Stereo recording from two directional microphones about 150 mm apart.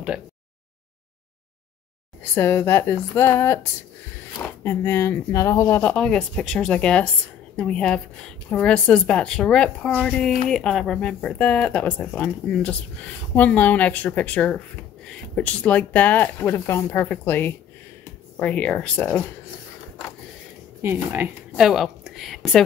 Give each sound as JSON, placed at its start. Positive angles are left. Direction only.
{"t": 2.3, "sound": "a woman's voice", "side_deg": 15}
{"t": 5.8, "sound": "a woman's voice", "side_deg": 10}
{"t": 20.8, "sound": "speech", "side_deg": -15}
{"t": 21.6, "sound": "speech", "side_deg": 0}